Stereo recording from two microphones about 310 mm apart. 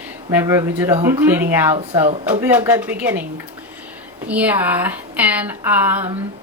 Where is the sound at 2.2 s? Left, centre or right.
Centre.